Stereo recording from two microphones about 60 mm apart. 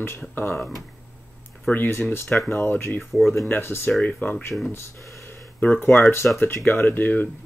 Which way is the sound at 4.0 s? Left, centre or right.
Left.